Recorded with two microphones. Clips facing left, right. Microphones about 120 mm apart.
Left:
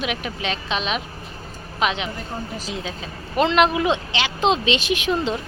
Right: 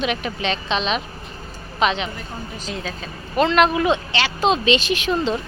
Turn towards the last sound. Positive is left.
turn(degrees=15)  # may be behind; listen again after turning